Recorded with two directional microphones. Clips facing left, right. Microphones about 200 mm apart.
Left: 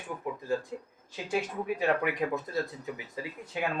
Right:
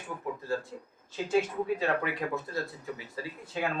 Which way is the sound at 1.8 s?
15° left (ahead or behind).